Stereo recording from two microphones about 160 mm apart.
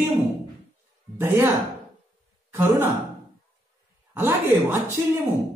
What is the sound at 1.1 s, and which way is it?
Speech, 15° right (ahead or behind).